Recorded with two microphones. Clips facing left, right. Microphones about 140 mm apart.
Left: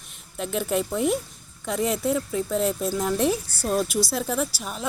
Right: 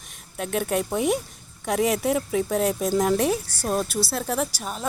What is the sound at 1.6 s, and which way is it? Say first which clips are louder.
Speech: right 2 dB; 60° right (ahead or behind).